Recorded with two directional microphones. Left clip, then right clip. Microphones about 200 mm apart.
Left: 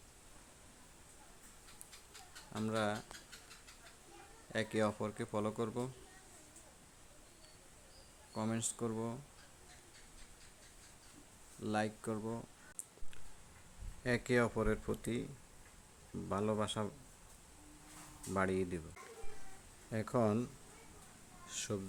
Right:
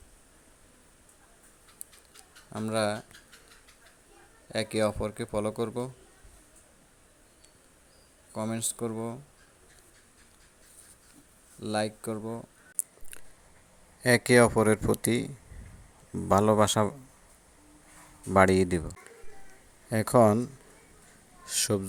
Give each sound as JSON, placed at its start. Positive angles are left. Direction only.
{"t": 2.5, "sound": "speech", "side_deg": -20}
{"t": 4.5, "sound": "speech", "side_deg": -20}
{"t": 8.3, "sound": "speech", "side_deg": -20}
{"t": 11.6, "sound": "speech", "side_deg": -20}
{"t": 14.0, "sound": "speech", "side_deg": -30}
{"t": 16.3, "sound": "speech", "side_deg": -35}
{"t": 18.3, "sound": "speech", "side_deg": -35}
{"t": 19.9, "sound": "speech", "side_deg": -35}
{"t": 21.4, "sound": "speech", "side_deg": -30}